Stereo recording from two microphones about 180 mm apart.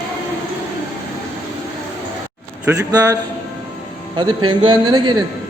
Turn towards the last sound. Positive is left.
turn(degrees=-25)  # may be behind; listen again after turning